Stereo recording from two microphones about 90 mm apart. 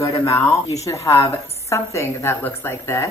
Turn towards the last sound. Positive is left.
turn(degrees=30)  # may be behind; listen again after turning